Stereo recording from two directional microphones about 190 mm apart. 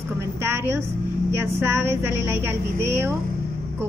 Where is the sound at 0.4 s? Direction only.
15° right (ahead or behind).